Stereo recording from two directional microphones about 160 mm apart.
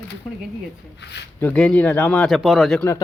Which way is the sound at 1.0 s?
90° left.